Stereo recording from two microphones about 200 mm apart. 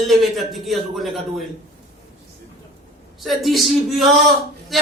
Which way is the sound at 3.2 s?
Centre (ahead or behind).